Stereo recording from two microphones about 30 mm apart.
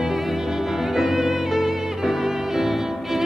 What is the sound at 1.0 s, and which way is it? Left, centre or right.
Music, centre.